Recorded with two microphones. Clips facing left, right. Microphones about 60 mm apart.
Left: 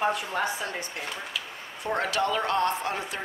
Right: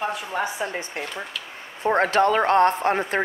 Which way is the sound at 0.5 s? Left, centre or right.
Right.